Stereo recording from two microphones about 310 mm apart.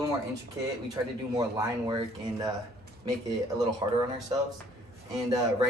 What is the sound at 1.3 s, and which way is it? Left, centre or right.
Speech, centre.